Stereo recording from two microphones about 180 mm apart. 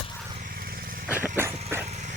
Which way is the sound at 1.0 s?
10° right (ahead or behind).